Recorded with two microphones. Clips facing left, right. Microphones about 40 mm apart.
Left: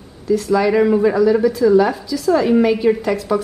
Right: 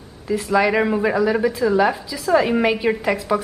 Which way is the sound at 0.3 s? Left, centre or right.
Centre.